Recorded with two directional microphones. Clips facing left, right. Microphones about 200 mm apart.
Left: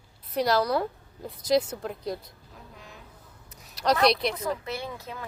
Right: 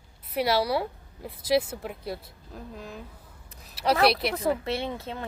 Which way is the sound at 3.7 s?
5° right (ahead or behind).